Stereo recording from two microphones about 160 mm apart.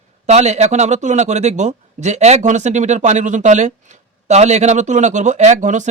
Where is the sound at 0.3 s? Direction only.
45° right (ahead or behind).